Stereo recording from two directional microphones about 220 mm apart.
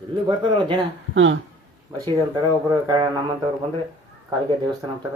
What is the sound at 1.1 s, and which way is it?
Speech, 60° right (ahead or behind).